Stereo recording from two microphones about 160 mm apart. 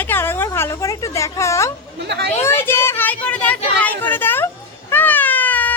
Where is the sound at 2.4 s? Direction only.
15° left (ahead or behind).